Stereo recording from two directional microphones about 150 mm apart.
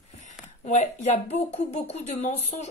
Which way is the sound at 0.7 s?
50° left (ahead or behind).